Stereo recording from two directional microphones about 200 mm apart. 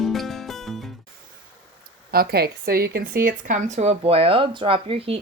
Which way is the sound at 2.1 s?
50° right (ahead or behind).